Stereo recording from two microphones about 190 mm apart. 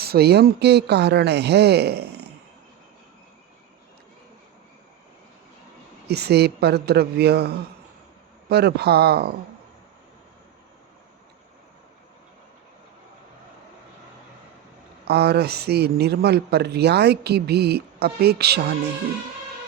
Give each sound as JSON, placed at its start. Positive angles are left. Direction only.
{"t": 0.0, "sound": "a man's voice", "side_deg": -55}
{"t": 6.1, "sound": "a man's voice", "side_deg": -60}
{"t": 15.0, "sound": "a man's voice", "side_deg": -60}